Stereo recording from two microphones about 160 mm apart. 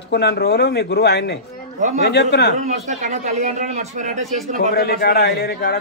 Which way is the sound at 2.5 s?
50° right (ahead or behind).